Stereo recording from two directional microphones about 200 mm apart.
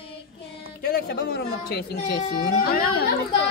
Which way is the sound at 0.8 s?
50° left (ahead or behind).